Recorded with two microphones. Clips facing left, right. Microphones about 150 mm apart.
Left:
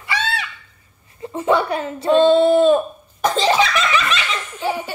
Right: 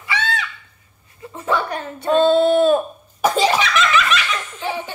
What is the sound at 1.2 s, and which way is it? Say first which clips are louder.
Speech: left 4 dB; 25° left (ahead or behind).